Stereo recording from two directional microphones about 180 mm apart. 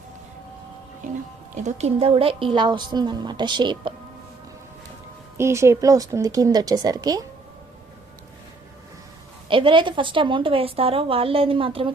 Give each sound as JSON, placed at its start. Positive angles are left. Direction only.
{"t": 1.6, "sound": "a woman's voice", "side_deg": -35}
{"t": 5.4, "sound": "a woman's voice", "side_deg": -15}
{"t": 9.5, "sound": "a woman's voice", "side_deg": -30}